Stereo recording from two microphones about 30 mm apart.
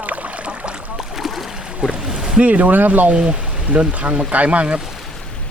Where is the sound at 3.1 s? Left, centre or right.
Right.